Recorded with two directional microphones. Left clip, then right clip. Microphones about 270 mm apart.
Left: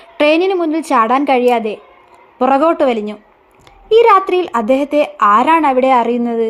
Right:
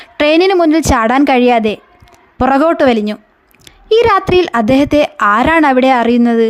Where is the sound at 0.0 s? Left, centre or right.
Right.